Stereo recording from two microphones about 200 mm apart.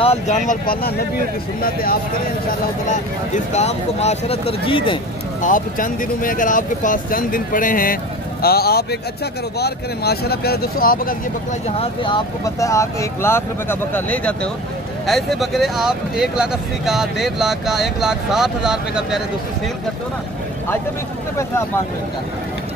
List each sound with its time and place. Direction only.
0.0 s speech: 35° left (ahead or behind)
2.9 s speech: 35° left (ahead or behind)
5.4 s speech: 40° left (ahead or behind)
11.8 s speech: 25° left (ahead or behind); by 19.2 s 5° right (ahead or behind)